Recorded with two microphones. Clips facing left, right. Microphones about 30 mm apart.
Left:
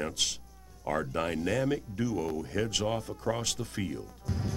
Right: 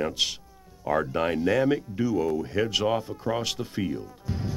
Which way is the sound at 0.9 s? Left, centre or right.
Centre.